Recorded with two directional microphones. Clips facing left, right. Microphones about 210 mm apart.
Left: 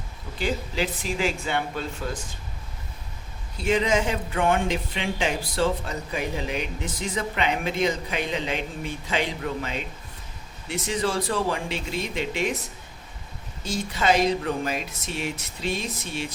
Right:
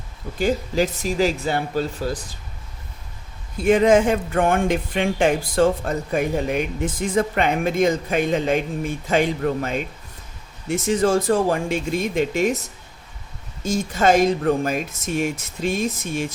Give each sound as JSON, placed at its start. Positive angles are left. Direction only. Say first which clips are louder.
{"t": 0.3, "sound": "speech", "louder": "right 7 dB", "side_deg": -45}
{"t": 3.6, "sound": "speech", "louder": "right 8 dB", "side_deg": -50}
{"t": 13.7, "sound": "speech", "louder": "right 5 dB", "side_deg": -45}